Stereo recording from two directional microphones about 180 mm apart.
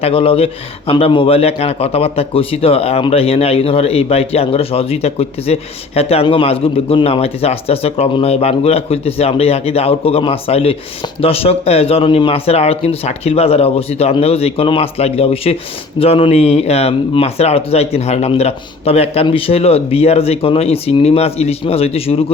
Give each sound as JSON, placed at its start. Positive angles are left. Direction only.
{"t": 0.0, "sound": "speech", "side_deg": 30}